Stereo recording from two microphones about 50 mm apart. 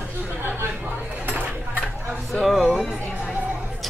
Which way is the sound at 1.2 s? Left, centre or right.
Right.